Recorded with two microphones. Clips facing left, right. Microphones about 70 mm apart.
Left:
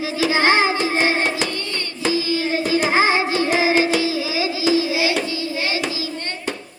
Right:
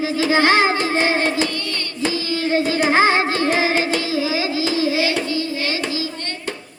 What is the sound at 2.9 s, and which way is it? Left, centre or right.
Music, centre.